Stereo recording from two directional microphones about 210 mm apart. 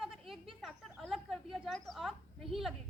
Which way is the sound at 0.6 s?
Centre (ahead or behind).